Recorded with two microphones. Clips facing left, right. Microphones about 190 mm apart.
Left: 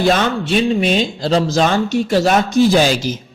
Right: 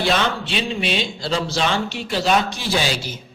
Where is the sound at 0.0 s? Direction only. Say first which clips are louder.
Left 5 dB; 45° left (ahead or behind).